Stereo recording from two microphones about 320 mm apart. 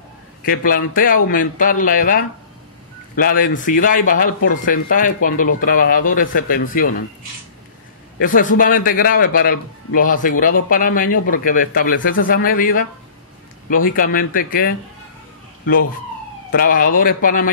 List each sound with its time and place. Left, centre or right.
0.4 s speech: left
8.2 s speech: left
13.8 s speech: left
16.5 s speech: left